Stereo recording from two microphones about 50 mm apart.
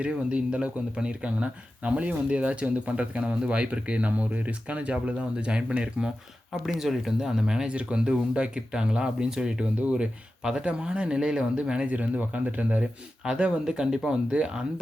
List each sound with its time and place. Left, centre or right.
0.0 s speech: right
6.5 s speech: centre
7.7 s speech: right
12.8 s speech: centre